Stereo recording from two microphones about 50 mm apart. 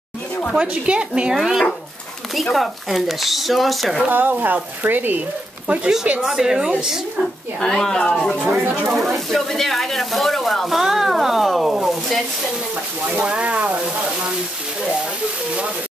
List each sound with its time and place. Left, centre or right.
0.6 s a woman's voice: right
1.3 s speech: centre
4.1 s speech: right
5.7 s a woman's voice: right
6.2 s a woman's voice: centre
7.6 s speech: centre
8.5 s speech: right
8.9 s speech: centre
13.1 s a woman's voice: right